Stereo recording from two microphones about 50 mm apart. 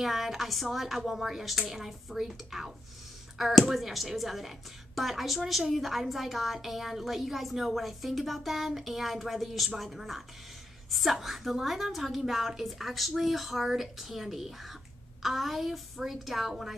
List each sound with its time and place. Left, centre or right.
0.0 s speech: centre